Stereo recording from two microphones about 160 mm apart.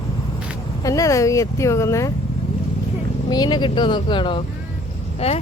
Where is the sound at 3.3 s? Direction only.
25° left (ahead or behind).